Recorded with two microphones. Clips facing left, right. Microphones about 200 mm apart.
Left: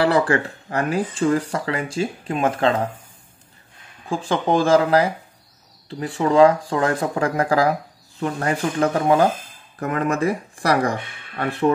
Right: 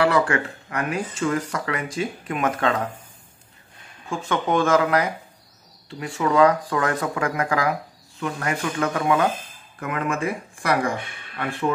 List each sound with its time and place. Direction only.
0.0 s speech: 35° left (ahead or behind)
4.1 s speech: 30° left (ahead or behind)